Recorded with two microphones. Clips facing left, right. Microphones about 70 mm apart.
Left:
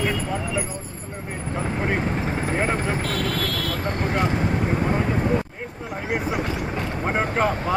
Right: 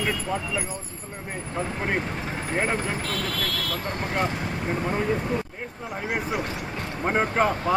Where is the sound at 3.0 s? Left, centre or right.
Left.